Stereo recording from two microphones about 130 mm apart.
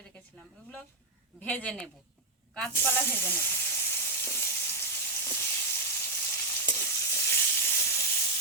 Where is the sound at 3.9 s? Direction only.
20° left (ahead or behind).